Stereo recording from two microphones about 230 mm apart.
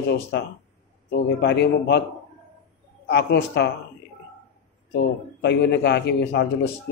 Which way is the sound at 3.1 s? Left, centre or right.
Left.